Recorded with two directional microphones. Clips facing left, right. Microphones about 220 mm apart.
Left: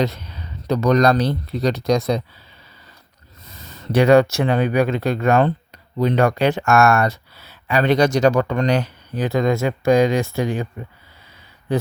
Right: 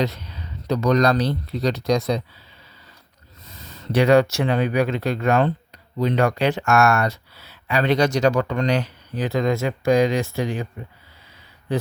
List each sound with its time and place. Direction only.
0.7 s speech: 50° left (ahead or behind)
3.9 s speech: 50° left (ahead or behind)